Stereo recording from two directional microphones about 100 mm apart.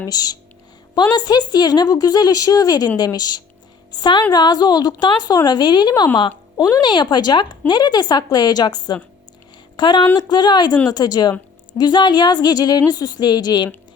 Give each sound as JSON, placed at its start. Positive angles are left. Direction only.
{"t": 0.0, "sound": "a woman's voice", "side_deg": 40}